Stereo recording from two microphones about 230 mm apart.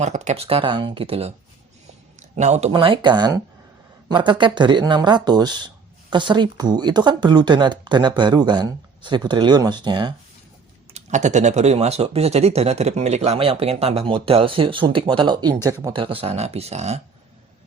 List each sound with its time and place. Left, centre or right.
0.0 s speech: right
2.3 s speech: right
10.9 s speech: right